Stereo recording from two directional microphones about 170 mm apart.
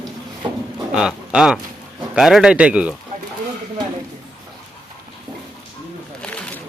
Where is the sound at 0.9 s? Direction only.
5° right (ahead or behind).